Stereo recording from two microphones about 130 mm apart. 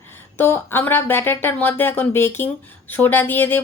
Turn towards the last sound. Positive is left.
turn(degrees=15)  # may be behind; listen again after turning